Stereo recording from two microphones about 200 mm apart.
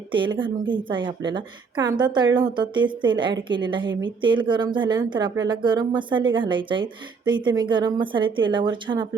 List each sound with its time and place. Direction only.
0.1 s speech: 25° right (ahead or behind)